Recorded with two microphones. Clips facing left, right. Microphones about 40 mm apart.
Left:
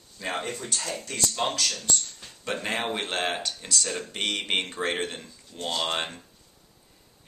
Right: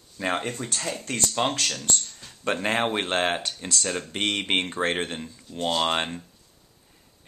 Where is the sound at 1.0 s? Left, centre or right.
Right.